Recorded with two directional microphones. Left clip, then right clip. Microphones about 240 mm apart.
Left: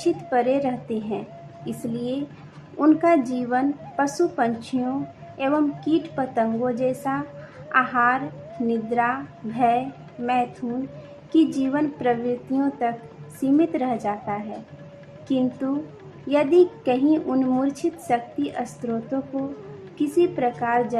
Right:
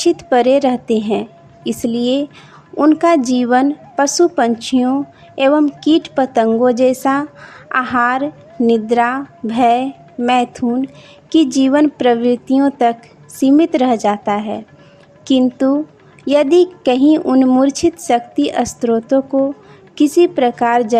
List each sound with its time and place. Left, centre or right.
0.0 s a woman's voice: right
11.5 s a woman's voice: right